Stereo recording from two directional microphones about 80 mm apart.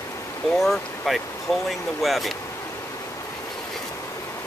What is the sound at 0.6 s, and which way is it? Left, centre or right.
Speech, centre.